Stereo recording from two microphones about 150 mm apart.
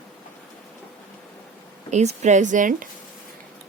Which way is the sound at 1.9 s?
50° right (ahead or behind).